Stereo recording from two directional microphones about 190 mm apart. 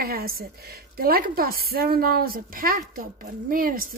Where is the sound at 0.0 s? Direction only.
55° right (ahead or behind).